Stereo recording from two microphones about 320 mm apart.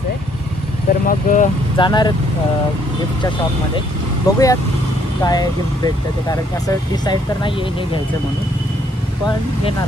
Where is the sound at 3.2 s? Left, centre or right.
Centre.